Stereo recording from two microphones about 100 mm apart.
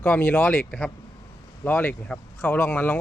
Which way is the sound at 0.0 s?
15° left (ahead or behind).